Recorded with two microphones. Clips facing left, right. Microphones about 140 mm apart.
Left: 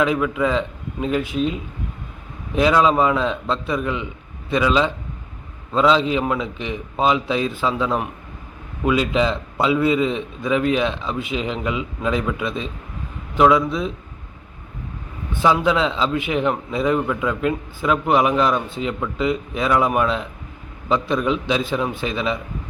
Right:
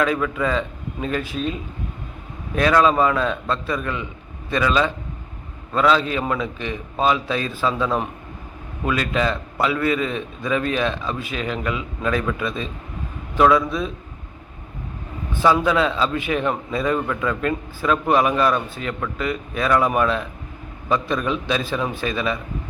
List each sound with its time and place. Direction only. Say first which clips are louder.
0.0 s a man's voice: left 2 dB; 10° left (ahead or behind)
2.6 s a man's voice: left 1 dB; 15° left (ahead or behind)
15.4 s a man's voice: even; 10° left (ahead or behind)